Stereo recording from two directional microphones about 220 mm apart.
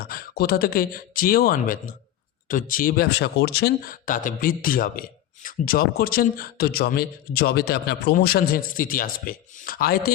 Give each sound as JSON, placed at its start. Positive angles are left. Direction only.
{"t": 0.0, "sound": "speech", "side_deg": 45}